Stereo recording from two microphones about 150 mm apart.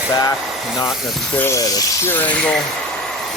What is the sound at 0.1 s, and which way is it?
Speech, 20° left (ahead or behind).